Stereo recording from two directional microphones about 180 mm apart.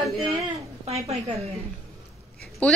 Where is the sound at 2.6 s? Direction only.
5° left (ahead or behind).